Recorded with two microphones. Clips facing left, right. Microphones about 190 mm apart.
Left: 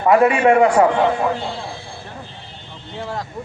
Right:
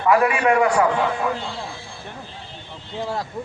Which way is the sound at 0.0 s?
30° left (ahead or behind).